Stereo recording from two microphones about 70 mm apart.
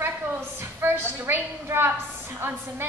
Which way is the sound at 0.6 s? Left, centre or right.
Right.